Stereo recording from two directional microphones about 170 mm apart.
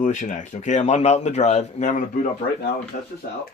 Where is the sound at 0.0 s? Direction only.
45° left (ahead or behind).